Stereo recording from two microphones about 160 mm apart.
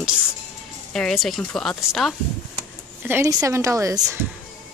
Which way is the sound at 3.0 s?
15° right (ahead or behind).